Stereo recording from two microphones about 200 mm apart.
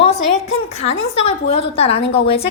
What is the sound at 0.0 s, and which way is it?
A woman's voice, 35° left (ahead or behind).